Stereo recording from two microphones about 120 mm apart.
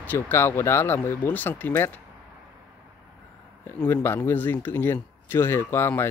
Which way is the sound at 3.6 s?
20° left (ahead or behind).